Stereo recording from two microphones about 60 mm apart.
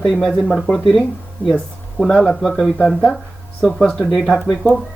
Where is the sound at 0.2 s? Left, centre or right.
Centre.